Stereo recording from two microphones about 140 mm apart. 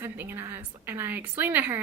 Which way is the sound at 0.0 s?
15° right (ahead or behind).